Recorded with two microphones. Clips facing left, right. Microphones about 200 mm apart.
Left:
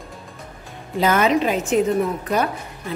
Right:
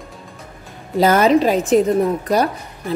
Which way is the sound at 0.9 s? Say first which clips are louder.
Right 5 dB; 40° right (ahead or behind).